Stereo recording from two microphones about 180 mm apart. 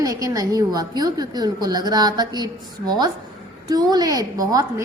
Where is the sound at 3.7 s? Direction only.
20° right (ahead or behind).